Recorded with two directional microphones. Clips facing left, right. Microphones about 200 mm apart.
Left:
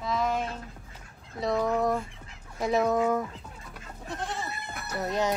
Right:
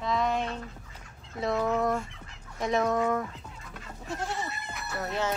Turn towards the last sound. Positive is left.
turn(degrees=15)  # may be behind; listen again after turning